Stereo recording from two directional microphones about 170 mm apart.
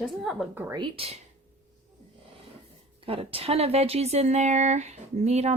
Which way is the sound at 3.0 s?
35° right (ahead or behind).